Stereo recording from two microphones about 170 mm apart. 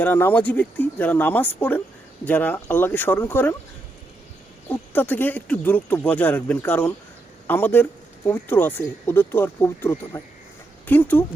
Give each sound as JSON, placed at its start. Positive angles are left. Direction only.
{"t": 0.0, "sound": "speech", "side_deg": 10}
{"t": 4.7, "sound": "speech", "side_deg": 10}